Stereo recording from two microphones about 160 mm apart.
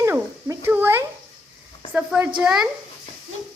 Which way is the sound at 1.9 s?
10° right (ahead or behind).